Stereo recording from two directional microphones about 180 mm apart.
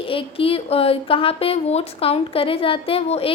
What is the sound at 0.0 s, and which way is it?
A woman's voice, 30° left (ahead or behind).